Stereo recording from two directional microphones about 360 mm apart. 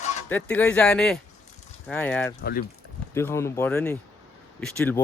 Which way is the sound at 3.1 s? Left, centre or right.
Centre.